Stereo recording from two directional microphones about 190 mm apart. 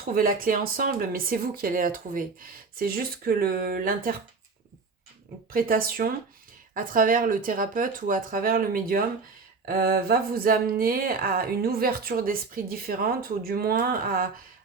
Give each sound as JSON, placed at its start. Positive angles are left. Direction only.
{"t": 0.0, "sound": "speech", "side_deg": -50}
{"t": 5.5, "sound": "speech", "side_deg": -50}